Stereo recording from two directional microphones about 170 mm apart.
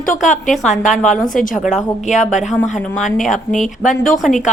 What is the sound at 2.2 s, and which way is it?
Speech, 45° left (ahead or behind).